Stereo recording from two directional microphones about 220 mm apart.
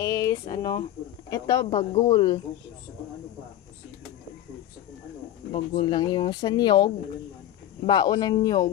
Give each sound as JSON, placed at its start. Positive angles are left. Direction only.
{"t": 0.0, "sound": "speech", "side_deg": 15}
{"t": 5.5, "sound": "speech", "side_deg": 25}